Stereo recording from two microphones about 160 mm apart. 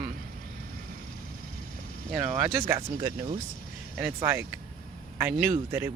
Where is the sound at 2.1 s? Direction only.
5° right (ahead or behind).